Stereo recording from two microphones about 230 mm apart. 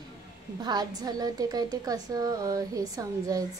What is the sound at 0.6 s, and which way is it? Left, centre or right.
A woman's voice, centre.